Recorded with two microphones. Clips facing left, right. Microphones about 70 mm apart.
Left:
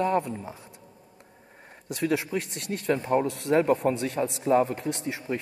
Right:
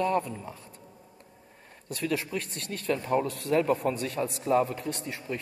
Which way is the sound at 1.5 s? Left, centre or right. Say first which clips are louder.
Left 3 dB; left.